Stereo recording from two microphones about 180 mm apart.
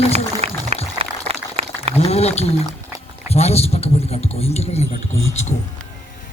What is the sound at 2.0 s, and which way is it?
A man's voice, 35° left (ahead or behind).